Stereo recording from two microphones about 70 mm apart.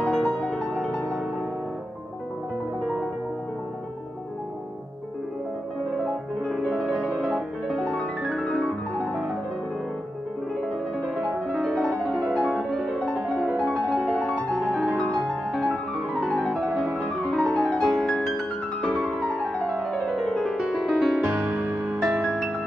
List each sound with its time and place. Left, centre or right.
0.2 s music: centre
2.8 s music: centre
6.0 s music: centre
8.4 s piano: centre
11.7 s music: centre
15.0 s music: centre
15.6 s music: centre
16.7 s music: centre
17.8 s music: centre
19.1 s music: centre
21.2 s music: right
22.0 s music: centre